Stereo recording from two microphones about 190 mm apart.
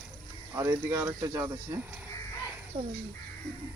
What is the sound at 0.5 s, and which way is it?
Speech, 15° right (ahead or behind).